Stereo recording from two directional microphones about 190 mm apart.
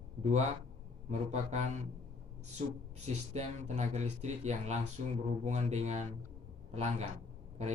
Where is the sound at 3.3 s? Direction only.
35° right (ahead or behind).